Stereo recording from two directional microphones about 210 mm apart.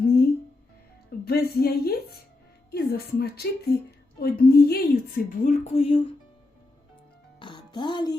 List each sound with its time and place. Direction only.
1.2 s a woman's voice: 50° left (ahead or behind); by 6.0 s 30° left (ahead or behind)
7.3 s music: 20° left (ahead or behind)